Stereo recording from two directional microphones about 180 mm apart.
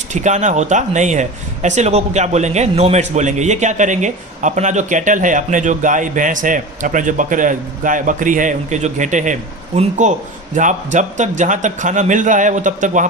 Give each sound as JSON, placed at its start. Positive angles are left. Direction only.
{"t": 0.1, "sound": "speech", "side_deg": -40}